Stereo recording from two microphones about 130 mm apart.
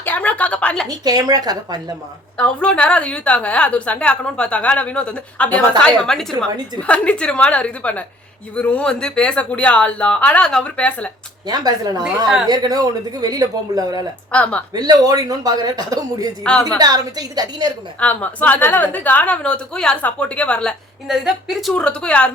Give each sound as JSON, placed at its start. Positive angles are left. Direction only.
{"t": 0.0, "sound": "a woman's voice", "side_deg": 10}
{"t": 0.9, "sound": "speech", "side_deg": -30}
{"t": 2.4, "sound": "a woman's voice", "side_deg": 10}
{"t": 11.4, "sound": "speech", "side_deg": -30}
{"t": 14.3, "sound": "a woman's voice", "side_deg": 10}
{"t": 14.7, "sound": "speech", "side_deg": -30}
{"t": 16.4, "sound": "a woman's voice", "side_deg": 10}
{"t": 16.6, "sound": "speech", "side_deg": -30}
{"t": 18.0, "sound": "a woman's voice", "side_deg": 10}
{"t": 21.1, "sound": "speech", "side_deg": -5}
{"t": 21.7, "sound": "a woman's voice", "side_deg": 5}